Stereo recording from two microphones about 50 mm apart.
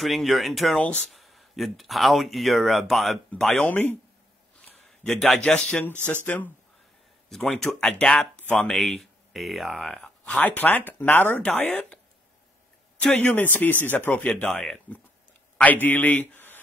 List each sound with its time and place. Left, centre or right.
0.0 s speech: centre
3.5 s speech: left
4.6 s a sound: centre
5.4 s speech: centre
6.2 s speech: left
7.2 s speech: centre
8.0 s speech: left
8.7 s speech: centre
10.2 s speech: left
11.4 s speech: left
13.0 s speech: left
14.9 s a man's voice: left